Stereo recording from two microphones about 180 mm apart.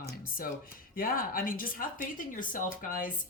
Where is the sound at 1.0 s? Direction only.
50° left (ahead or behind).